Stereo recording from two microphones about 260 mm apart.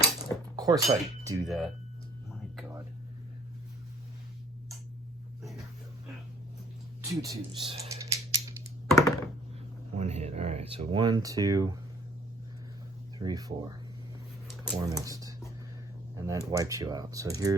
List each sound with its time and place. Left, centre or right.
0.5 s chink: centre
0.9 s speech: centre
1.5 s speech: centre
2.6 s a sound: centre
7.0 s typing: centre
9.0 s computer keyboard: centre
9.9 s speech: right
13.1 s speech: centre
14.8 s speech: centre